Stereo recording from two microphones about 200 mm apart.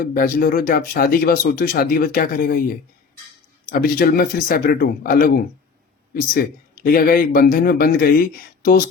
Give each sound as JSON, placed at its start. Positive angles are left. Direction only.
{"t": 0.0, "sound": "speech", "side_deg": 45}
{"t": 3.7, "sound": "speech", "side_deg": 45}
{"t": 6.8, "sound": "speech", "side_deg": 45}